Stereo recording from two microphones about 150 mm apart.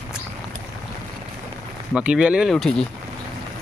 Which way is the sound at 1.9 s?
5° right (ahead or behind).